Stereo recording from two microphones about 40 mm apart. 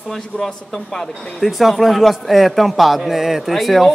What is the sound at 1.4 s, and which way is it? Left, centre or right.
A man's voice, centre.